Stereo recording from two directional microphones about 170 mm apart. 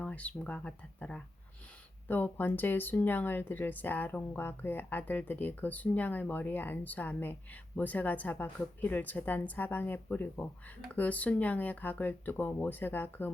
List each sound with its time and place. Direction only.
0.0 s speech: 10° left (ahead or behind)